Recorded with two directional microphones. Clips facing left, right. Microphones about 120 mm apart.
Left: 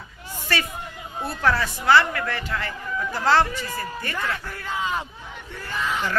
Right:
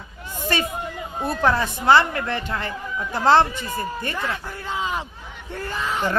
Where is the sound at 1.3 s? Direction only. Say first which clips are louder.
Right 2 dB; 20° right (ahead or behind).